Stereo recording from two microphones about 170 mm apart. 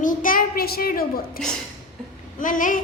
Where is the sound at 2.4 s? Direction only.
50° left (ahead or behind).